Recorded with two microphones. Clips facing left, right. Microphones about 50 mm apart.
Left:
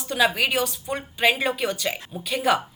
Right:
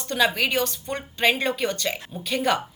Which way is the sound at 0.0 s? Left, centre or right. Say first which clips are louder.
Left 1 dB; centre.